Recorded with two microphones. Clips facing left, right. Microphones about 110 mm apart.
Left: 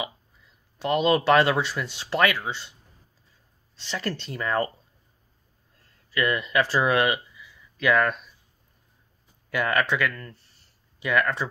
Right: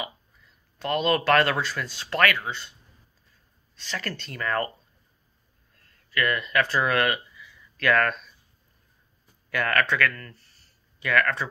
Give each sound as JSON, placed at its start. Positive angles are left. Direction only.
{"t": 0.7, "sound": "speech", "side_deg": 20}
{"t": 3.7, "sound": "speech", "side_deg": 20}
{"t": 6.1, "sound": "speech", "side_deg": 20}
{"t": 9.5, "sound": "speech", "side_deg": 15}